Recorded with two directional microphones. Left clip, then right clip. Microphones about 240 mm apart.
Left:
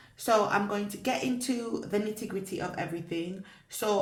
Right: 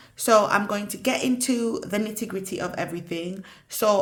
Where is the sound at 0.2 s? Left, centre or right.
Right.